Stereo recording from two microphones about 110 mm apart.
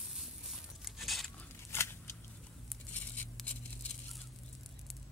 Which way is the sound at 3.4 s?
Centre (ahead or behind).